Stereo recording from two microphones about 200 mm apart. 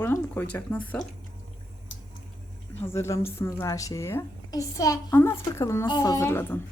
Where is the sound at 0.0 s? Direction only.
10° left (ahead or behind).